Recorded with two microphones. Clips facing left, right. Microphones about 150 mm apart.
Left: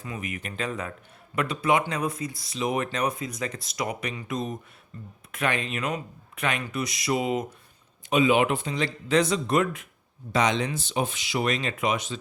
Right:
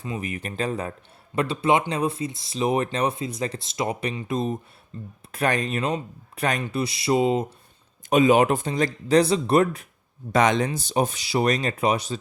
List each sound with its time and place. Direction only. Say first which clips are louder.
0.0 s speech: right 4 dB; 30° right (ahead or behind)
5.3 s speech: right 4 dB; 40° right (ahead or behind)
8.1 s speech: right 4 dB; 40° right (ahead or behind)
10.3 s speech: right 4 dB; 50° right (ahead or behind)
10.7 s speech: right 4 dB; 40° right (ahead or behind)